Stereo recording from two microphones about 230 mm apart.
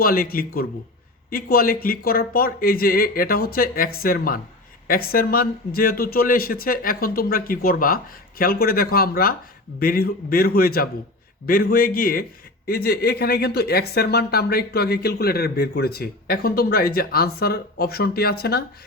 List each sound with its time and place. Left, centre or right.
0.0 s a man's voice: left